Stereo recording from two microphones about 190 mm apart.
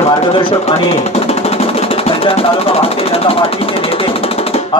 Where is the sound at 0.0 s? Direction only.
25° left (ahead or behind).